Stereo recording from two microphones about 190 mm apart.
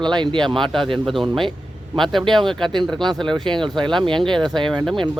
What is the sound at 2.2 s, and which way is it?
Speech, 25° right (ahead or behind).